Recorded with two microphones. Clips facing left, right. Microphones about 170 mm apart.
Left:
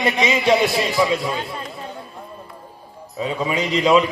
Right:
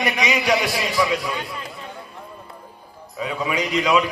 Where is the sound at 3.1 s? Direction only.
25° left (ahead or behind).